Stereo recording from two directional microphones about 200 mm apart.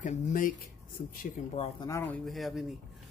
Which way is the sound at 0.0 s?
40° left (ahead or behind).